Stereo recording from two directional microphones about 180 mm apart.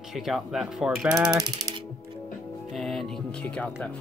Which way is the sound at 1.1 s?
20° right (ahead or behind).